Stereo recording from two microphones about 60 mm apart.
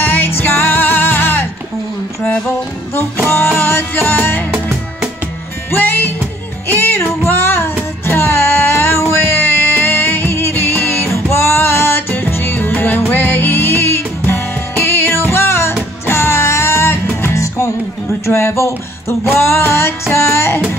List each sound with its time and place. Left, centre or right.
0.0 s music: left
2.9 s music: left
5.7 s music: left
7.0 s music: left
18.2 s a sound: left
19.4 s music: left